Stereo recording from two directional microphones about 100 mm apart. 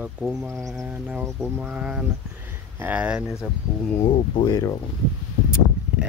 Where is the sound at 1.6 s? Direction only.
10° right (ahead or behind).